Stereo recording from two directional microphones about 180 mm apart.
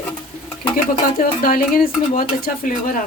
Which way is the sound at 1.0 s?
50° left (ahead or behind).